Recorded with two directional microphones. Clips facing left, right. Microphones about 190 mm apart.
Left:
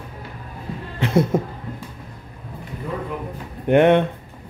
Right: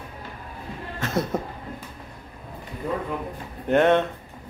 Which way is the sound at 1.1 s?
30° left (ahead or behind).